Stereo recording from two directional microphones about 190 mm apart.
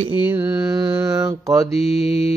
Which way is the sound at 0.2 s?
10° right (ahead or behind).